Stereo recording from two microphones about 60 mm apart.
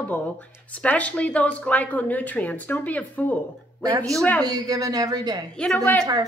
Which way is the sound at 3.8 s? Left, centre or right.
Right.